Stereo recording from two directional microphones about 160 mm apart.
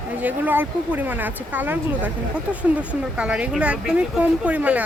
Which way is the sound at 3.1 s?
5° right (ahead or behind).